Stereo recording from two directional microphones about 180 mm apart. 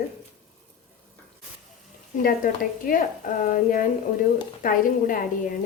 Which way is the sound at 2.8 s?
50° left (ahead or behind).